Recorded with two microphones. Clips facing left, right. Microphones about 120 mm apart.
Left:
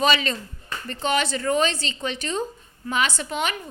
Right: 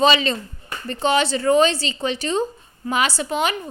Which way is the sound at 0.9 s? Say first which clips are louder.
Right 5 dB; 30° right (ahead or behind).